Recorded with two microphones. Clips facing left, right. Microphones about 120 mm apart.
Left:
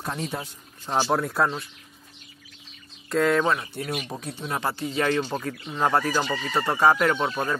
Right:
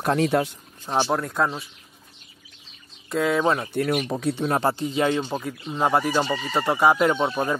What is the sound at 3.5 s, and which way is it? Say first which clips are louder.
Speech: right 5 dB; 55° right (ahead or behind).